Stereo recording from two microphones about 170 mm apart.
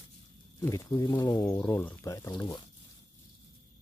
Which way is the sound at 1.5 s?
10° left (ahead or behind).